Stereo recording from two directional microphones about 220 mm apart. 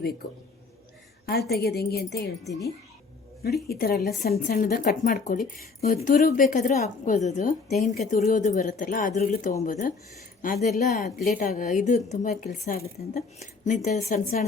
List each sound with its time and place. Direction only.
1.3 s a woman's voice: 45° left (ahead or behind)
2.5 s speech: 15° left (ahead or behind)
3.4 s a woman's voice: 45° left (ahead or behind)